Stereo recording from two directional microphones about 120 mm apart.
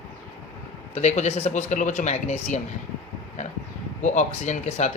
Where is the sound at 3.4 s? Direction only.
80° left.